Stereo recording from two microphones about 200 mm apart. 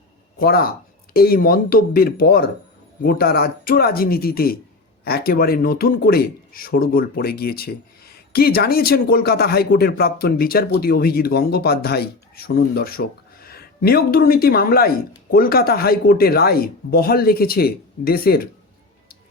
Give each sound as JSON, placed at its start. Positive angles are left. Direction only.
{"t": 0.3, "sound": "speech", "side_deg": 50}